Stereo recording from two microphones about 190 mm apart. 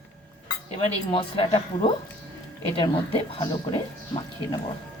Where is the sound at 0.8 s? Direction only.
25° left (ahead or behind).